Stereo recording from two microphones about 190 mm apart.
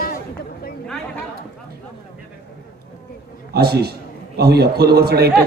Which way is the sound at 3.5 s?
55° right (ahead or behind).